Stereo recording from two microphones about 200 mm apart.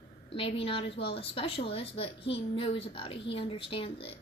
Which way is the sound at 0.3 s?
25° left (ahead or behind).